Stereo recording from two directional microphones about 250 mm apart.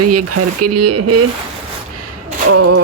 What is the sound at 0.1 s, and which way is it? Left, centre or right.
Speech, right.